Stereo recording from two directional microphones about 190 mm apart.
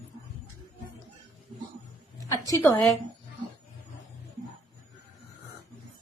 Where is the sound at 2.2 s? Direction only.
15° left (ahead or behind).